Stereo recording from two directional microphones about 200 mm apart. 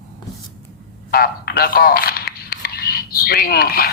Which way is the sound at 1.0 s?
50° left (ahead or behind).